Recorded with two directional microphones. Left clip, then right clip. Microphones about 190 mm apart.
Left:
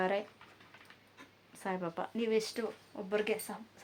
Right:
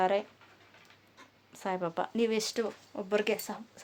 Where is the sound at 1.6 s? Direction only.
45° right (ahead or behind).